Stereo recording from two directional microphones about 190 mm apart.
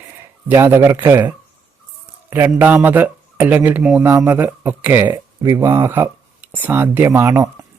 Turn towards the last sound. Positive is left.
turn(degrees=-15)  # may be behind; listen again after turning